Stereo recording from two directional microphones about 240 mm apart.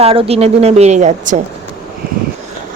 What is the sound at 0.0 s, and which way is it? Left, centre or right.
Speech, right.